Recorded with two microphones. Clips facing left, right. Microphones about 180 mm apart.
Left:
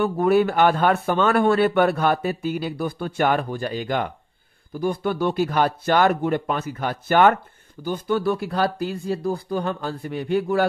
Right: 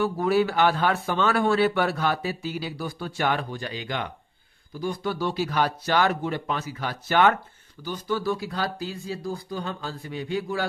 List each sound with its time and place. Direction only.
0.0 s a man's voice: 55° left (ahead or behind)